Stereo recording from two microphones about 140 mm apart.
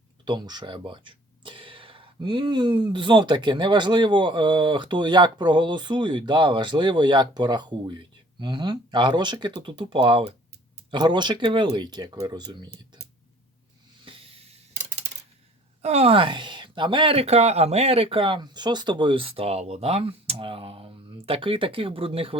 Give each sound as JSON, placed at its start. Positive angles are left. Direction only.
{"t": 0.3, "sound": "speech", "side_deg": -30}
{"t": 14.0, "sound": "a sound", "side_deg": -40}
{"t": 15.8, "sound": "speech", "side_deg": -50}